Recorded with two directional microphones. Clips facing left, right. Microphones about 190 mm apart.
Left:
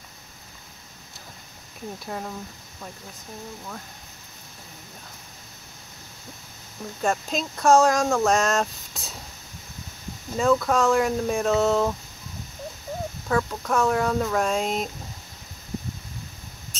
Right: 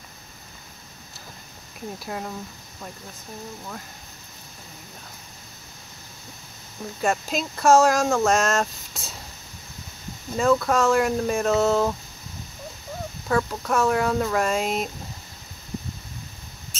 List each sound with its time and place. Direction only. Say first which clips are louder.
2.0 s speech: right 1 dB; centre (ahead or behind)
7.0 s speech: right 1 dB; 5° right (ahead or behind)
10.3 s speech: right 1 dB; centre (ahead or behind)
13.3 s speech: right 1 dB; centre (ahead or behind)